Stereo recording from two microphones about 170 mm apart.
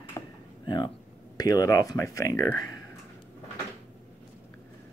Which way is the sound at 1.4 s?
20° left (ahead or behind).